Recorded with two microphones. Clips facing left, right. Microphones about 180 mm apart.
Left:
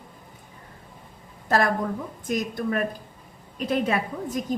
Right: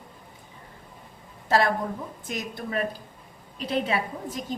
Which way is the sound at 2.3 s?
50° left (ahead or behind).